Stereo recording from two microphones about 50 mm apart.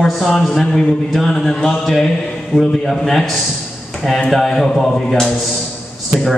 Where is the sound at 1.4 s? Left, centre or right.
Centre.